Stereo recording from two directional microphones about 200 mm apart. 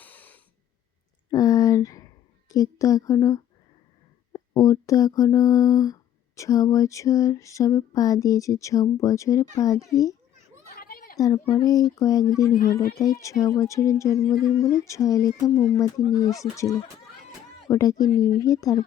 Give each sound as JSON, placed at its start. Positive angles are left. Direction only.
{"t": 0.0, "sound": "breathing", "side_deg": 10}
{"t": 1.3, "sound": "a sound", "side_deg": 15}
{"t": 2.5, "sound": "speech", "side_deg": 15}
{"t": 10.8, "sound": "a sound", "side_deg": 50}
{"t": 11.2, "sound": "speech", "side_deg": 20}
{"t": 18.1, "sound": "speech", "side_deg": 45}
{"t": 18.4, "sound": "speech", "side_deg": 15}